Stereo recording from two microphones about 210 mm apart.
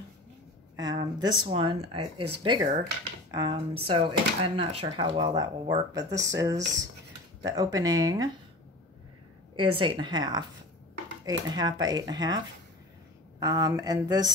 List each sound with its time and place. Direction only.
0.7 s speech: 20° right (ahead or behind)
9.8 s speech: 25° right (ahead or behind)
13.4 s speech: 15° right (ahead or behind)